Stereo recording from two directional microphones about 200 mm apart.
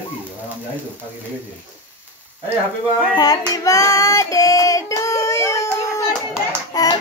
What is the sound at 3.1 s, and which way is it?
Child singing, 20° left (ahead or behind).